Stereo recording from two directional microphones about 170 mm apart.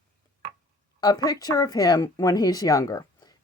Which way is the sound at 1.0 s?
25° left (ahead or behind).